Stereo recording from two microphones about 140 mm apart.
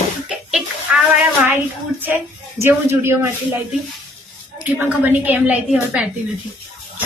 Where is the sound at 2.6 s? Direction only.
15° right (ahead or behind).